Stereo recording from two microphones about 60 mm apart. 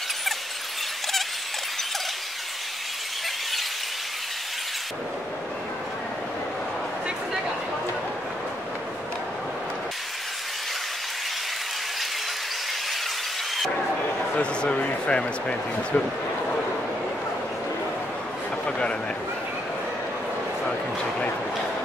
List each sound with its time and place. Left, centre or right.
14.4 s speech: centre
18.7 s a man's voice: centre